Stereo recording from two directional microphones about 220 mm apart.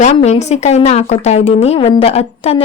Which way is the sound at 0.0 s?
30° left (ahead or behind).